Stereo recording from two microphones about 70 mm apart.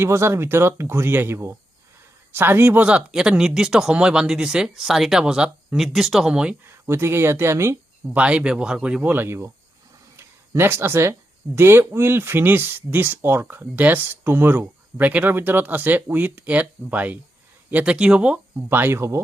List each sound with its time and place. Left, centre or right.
0.0 s speech: right; by 6.3 s centre
6.3 s speech: centre
6.7 s speech: right
8.1 s speech: centre
9.0 s speech: right
10.2 s a sound: right
11.5 s speech: right; by 18.3 s centre
18.7 s speech: right